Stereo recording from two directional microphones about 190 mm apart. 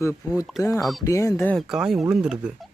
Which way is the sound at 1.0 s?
15° left (ahead or behind).